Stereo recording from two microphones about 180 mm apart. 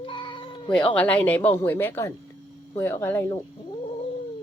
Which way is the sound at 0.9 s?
5° left (ahead or behind).